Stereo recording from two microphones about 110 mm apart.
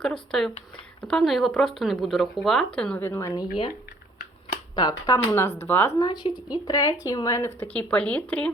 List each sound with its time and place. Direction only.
0.0 s speech: 5° left (ahead or behind)
3.0 s a woman's voice: 25° left (ahead or behind)
4.7 s a woman's voice: 40° left (ahead or behind); by 5.9 s 20° left (ahead or behind)
6.0 s speech: 40° left (ahead or behind); by 7.7 s 25° left (ahead or behind)
7.7 s speech: 10° left (ahead or behind)